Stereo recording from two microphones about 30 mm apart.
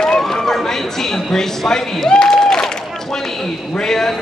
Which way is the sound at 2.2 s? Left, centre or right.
Centre.